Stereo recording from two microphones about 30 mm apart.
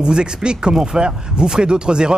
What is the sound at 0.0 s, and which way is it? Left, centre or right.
Speech, right.